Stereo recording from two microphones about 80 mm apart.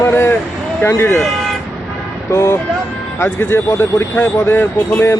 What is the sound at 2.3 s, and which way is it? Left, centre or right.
Speech, left.